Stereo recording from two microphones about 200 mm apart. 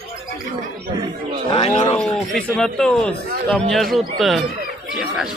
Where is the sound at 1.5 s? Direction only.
25° left (ahead or behind).